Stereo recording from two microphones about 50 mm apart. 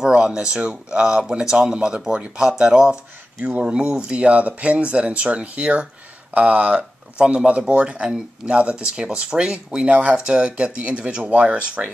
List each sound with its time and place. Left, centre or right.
0.0 s a sound: centre
0.6 s speech: centre
6.8 s speech: centre